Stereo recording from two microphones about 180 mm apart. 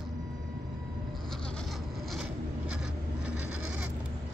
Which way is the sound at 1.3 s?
5° left (ahead or behind).